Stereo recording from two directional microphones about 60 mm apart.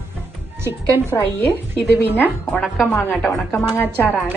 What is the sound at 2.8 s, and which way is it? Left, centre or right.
Speech, left.